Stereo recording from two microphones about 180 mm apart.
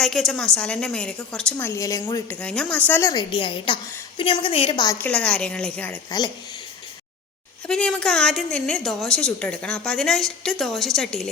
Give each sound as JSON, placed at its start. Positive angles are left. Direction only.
{"t": 0.0, "sound": "a woman's voice", "side_deg": 0}
{"t": 1.5, "sound": "a woman's voice", "side_deg": 15}
{"t": 2.3, "sound": "a woman's voice", "side_deg": 5}
{"t": 3.1, "sound": "a woman's voice", "side_deg": 25}
{"t": 4.9, "sound": "a woman's voice", "side_deg": 10}
{"t": 6.1, "sound": "a woman's voice", "side_deg": 20}
{"t": 7.7, "sound": "a woman's voice", "side_deg": 5}